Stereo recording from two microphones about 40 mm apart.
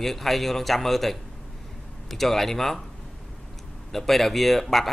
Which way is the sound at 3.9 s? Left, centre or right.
Centre.